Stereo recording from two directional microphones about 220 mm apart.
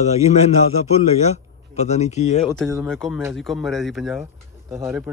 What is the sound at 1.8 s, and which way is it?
Speech, 30° left (ahead or behind).